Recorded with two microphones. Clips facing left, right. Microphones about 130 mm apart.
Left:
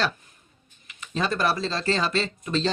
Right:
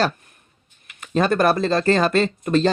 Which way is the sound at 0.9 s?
50° right (ahead or behind).